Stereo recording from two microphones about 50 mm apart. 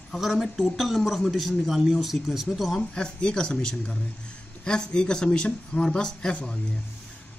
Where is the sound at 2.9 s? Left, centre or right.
Centre.